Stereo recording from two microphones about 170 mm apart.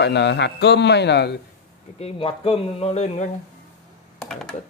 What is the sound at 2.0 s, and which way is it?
Speech, 35° left (ahead or behind).